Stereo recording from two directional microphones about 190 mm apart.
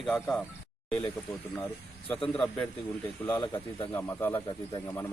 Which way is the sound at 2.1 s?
30° left (ahead or behind).